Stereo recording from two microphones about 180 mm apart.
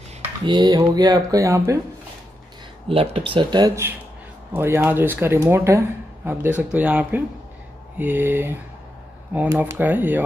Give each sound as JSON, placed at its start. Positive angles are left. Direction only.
{"t": 0.5, "sound": "speech", "side_deg": -25}
{"t": 2.9, "sound": "speech", "side_deg": -30}